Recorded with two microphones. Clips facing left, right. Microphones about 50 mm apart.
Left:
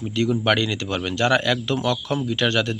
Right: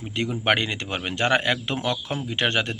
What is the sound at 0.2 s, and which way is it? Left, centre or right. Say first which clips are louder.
Speech: left 3 dB; right.